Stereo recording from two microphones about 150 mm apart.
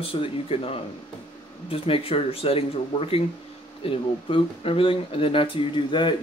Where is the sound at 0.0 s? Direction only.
35° left (ahead or behind).